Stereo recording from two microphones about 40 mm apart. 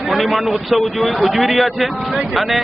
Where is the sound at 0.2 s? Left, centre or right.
Centre.